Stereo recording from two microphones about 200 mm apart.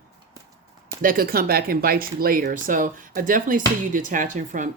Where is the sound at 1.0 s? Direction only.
45° right (ahead or behind).